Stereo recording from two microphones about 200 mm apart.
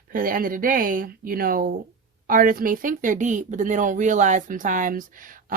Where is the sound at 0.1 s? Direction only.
45° right (ahead or behind).